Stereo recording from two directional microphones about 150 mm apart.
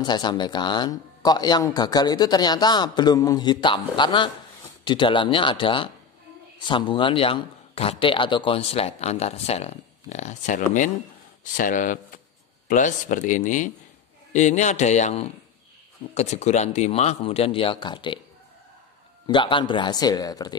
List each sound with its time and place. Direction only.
0.0 s speech: 30° left (ahead or behind)
19.2 s speech: 35° left (ahead or behind)